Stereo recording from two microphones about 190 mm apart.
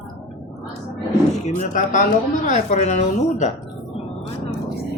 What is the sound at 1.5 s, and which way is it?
A woman's voice, 40° left (ahead or behind).